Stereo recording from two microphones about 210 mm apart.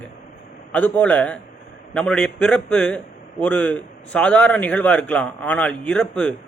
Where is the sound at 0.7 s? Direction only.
5° left (ahead or behind).